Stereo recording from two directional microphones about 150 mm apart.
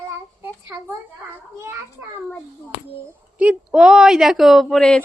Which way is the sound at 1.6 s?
15° right (ahead or behind).